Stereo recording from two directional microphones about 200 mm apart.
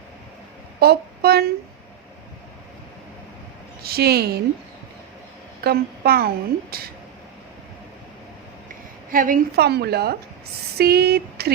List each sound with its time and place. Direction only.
0.8 s a sound: 50° right (ahead or behind)
3.8 s a woman's voice: 50° right (ahead or behind)
5.6 s a woman's voice: 50° right (ahead or behind)
9.1 s a woman's voice: 45° right (ahead or behind)